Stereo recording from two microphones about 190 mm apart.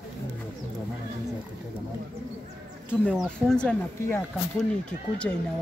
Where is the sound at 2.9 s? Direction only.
5° right (ahead or behind).